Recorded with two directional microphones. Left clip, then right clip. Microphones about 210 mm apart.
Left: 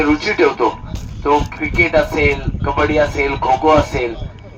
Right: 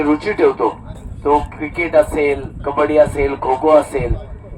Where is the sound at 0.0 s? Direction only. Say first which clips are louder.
Left 1 dB; 50° right (ahead or behind).